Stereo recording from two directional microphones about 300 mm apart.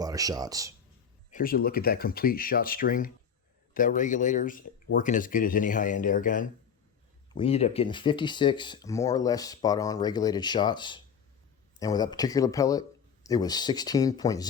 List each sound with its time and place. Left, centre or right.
0.0 s speech: centre
1.3 s speech: left; by 14.4 s centre